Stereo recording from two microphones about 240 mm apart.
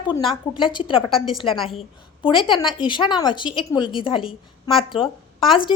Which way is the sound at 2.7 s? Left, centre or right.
Centre.